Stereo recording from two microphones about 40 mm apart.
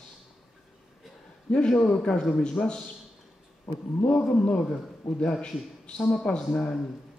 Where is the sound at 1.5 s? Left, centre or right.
Left.